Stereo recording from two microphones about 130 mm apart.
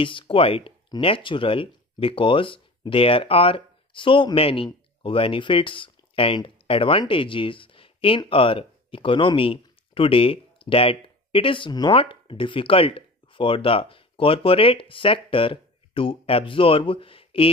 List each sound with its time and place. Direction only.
0.0 s speech: 45° left (ahead or behind)